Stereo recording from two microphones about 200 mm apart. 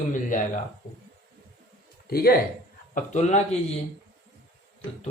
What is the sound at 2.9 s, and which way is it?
Speech, 35° left (ahead or behind).